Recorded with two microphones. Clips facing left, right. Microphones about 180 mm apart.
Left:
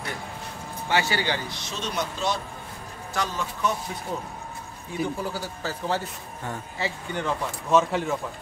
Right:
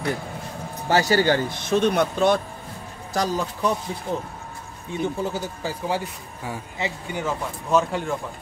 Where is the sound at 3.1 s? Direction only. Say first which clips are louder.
Right 5 dB; 40° right (ahead or behind).